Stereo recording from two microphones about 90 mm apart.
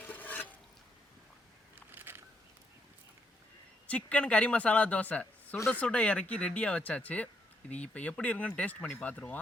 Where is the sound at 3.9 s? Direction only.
15° left (ahead or behind).